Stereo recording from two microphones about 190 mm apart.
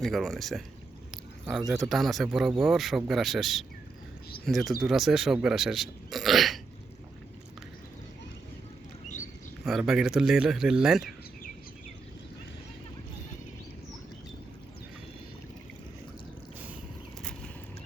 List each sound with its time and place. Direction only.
0.0 s speech: centre (ahead or behind)
1.1 s a sound: 5° right (ahead or behind)
1.7 s speech: centre (ahead or behind)
9.6 s speech: centre (ahead or behind)